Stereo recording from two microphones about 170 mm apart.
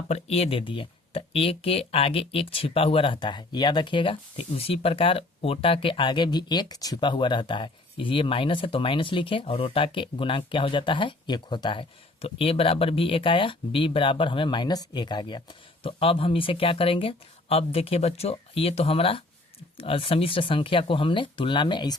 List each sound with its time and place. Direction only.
0.1 s speech: 35° left (ahead or behind)